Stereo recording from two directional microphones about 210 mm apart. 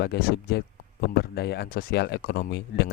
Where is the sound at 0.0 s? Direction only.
50° left (ahead or behind).